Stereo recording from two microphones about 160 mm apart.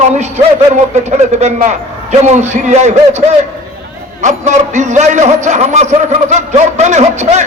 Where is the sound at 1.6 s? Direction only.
45° right (ahead or behind).